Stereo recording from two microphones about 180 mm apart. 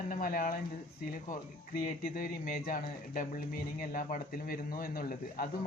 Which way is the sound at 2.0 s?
55° left (ahead or behind).